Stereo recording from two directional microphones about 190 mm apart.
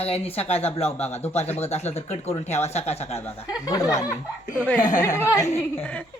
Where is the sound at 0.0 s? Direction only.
30° left (ahead or behind).